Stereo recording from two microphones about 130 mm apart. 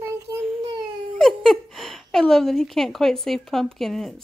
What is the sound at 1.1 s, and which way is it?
Speech, centre (ahead or behind).